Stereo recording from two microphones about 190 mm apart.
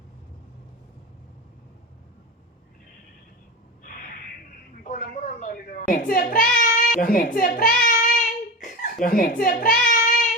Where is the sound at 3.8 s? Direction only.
45° left (ahead or behind).